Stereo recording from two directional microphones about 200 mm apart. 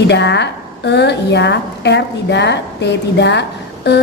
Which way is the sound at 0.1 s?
60° left (ahead or behind).